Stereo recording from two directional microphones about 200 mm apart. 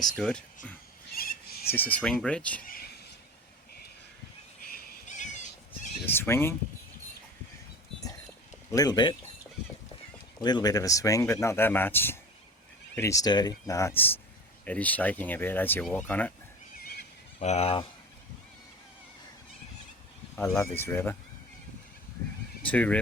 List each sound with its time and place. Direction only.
0.0 s speech: 5° left (ahead or behind)
1.1 s goat: 50° left (ahead or behind)
1.7 s speech: 10° left (ahead or behind)
2.6 s neigh: 50° left (ahead or behind)
4.7 s horse: 35° left (ahead or behind)
6.1 s speech: 10° left (ahead or behind)
8.7 s speech: 20° left (ahead or behind)
10.4 s speech: 20° left (ahead or behind)
16.7 s neigh: 50° left (ahead or behind)
17.4 s speech: 30° left (ahead or behind)
20.3 s speech: 10° left (ahead or behind)
22.6 s speech: 5° left (ahead or behind)